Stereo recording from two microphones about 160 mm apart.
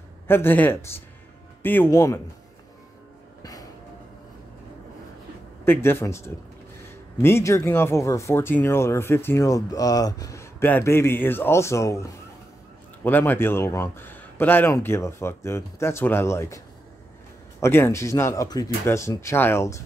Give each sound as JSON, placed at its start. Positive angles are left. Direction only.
{"t": 0.3, "sound": "speech", "side_deg": 15}
{"t": 5.7, "sound": "speech", "side_deg": 15}